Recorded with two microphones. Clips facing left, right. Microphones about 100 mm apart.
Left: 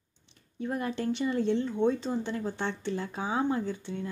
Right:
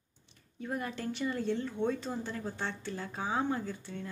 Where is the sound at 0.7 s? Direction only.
30° left (ahead or behind).